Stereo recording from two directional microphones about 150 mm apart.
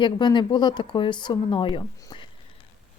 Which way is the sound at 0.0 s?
30° left (ahead or behind).